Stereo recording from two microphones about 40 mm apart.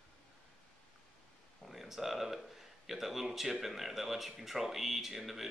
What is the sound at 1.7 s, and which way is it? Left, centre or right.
Speech, centre.